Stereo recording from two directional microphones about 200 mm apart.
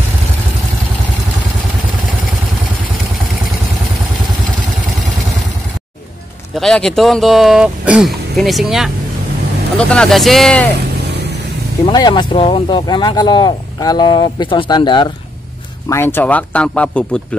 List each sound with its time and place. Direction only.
6.5 s speech: centre (ahead or behind)
11.8 s speech: 20° left (ahead or behind)
15.9 s speech: 10° left (ahead or behind)